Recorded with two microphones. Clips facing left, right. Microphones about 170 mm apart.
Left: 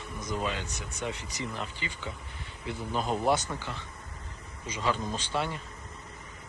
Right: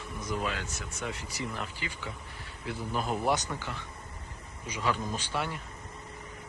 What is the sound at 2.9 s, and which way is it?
Speech, 5° right (ahead or behind).